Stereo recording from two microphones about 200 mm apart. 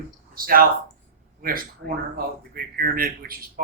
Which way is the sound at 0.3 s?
45° right (ahead or behind).